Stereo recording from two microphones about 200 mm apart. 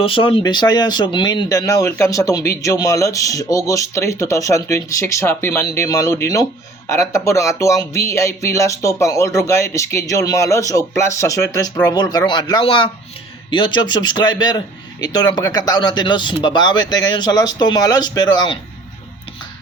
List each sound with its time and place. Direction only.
0.0 s speech: 25° left (ahead or behind)